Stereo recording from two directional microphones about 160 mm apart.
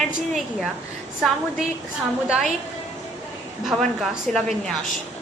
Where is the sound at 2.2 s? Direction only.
5° right (ahead or behind).